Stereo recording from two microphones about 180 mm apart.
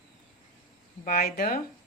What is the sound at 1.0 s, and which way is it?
Speech, 55° left (ahead or behind).